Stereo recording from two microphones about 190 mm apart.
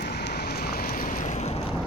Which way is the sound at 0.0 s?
60° left (ahead or behind).